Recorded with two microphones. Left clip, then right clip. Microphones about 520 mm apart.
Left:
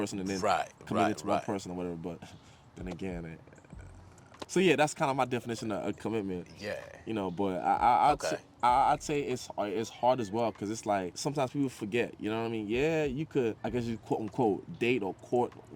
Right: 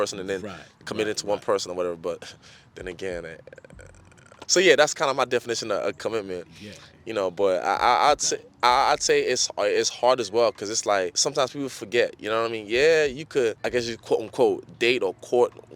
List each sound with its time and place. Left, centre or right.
0.0 s speech: right
4.5 s speech: right